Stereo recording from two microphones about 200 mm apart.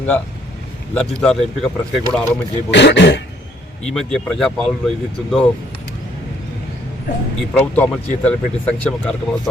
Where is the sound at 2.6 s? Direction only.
60° left (ahead or behind).